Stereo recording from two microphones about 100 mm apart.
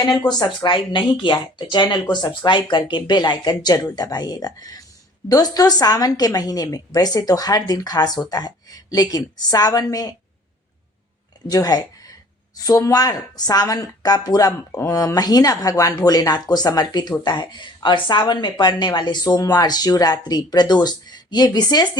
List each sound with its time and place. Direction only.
0.3 s a woman's voice: 45° left (ahead or behind)
11.4 s a woman's voice: 40° left (ahead or behind)